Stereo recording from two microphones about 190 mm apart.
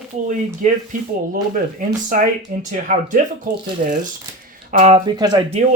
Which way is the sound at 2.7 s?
45° right (ahead or behind).